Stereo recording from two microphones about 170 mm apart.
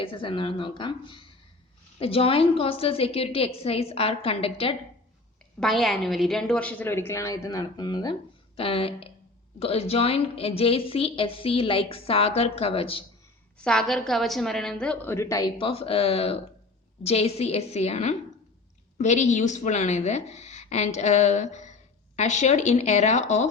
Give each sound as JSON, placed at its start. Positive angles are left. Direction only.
{"t": 0.0, "sound": "a woman's voice", "side_deg": 30}
{"t": 5.5, "sound": "a woman's voice", "side_deg": 0}
{"t": 13.7, "sound": "a woman's voice", "side_deg": 0}